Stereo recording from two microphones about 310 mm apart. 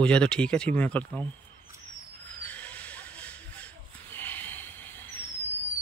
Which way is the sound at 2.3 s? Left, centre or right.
Centre.